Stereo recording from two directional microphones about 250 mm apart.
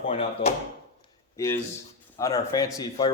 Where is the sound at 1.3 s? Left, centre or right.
Centre.